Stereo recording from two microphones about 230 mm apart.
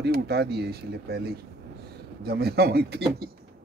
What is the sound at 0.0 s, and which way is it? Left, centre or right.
Speech, right.